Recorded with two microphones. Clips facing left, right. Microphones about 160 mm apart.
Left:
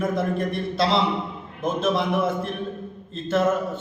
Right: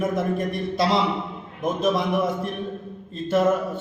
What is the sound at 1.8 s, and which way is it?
Speech, 15° right (ahead or behind).